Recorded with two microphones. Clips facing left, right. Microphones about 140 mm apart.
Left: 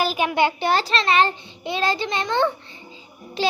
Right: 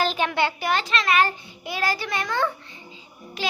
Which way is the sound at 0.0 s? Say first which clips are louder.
Left 3 dB; 10° left (ahead or behind).